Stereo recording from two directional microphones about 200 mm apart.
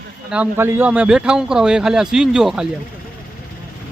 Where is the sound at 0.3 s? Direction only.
10° right (ahead or behind).